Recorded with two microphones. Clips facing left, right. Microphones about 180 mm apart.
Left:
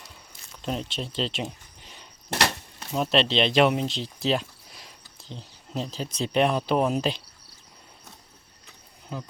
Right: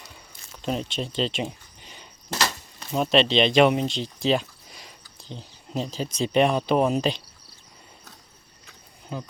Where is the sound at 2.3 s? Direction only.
60° left (ahead or behind).